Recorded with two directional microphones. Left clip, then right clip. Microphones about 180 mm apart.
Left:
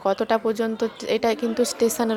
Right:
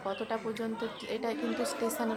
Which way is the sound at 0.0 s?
40° left (ahead or behind).